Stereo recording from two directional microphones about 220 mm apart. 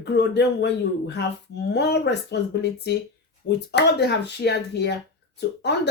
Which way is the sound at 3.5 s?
50° left (ahead or behind).